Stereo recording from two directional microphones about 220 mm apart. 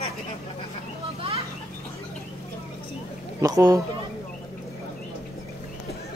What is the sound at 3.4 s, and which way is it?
Speech, 15° right (ahead or behind).